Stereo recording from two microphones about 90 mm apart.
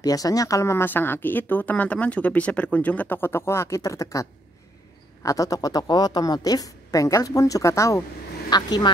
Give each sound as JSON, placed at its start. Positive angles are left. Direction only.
{"t": 0.0, "sound": "a woman's voice", "side_deg": 40}
{"t": 8.5, "sound": "speech", "side_deg": 50}